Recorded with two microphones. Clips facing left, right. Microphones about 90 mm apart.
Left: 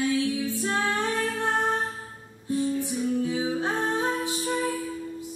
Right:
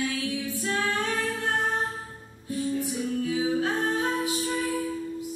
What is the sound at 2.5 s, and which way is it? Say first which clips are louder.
Music: left 2 dB; 25° left (ahead or behind).